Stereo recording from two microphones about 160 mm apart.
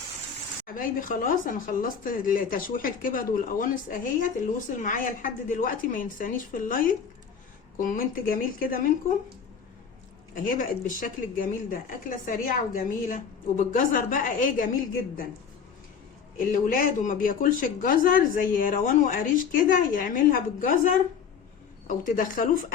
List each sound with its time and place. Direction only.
0.8 s speech: 60° left (ahead or behind)
10.3 s speech: 55° left (ahead or behind)
16.4 s speech: 60° left (ahead or behind)